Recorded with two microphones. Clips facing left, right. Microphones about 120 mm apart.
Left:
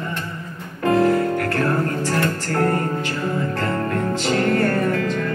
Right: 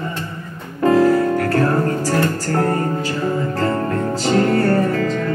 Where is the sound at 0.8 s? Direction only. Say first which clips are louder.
Right 3 dB; 35° right (ahead or behind).